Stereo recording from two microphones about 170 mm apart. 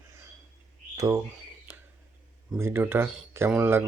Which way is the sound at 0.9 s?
20° right (ahead or behind).